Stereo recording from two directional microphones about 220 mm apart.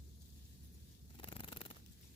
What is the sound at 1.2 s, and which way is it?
Purr, 25° left (ahead or behind).